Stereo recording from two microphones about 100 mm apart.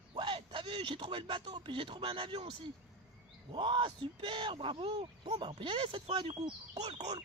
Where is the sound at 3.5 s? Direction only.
55° right (ahead or behind).